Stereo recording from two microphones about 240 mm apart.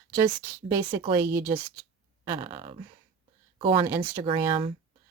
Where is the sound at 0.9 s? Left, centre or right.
Right.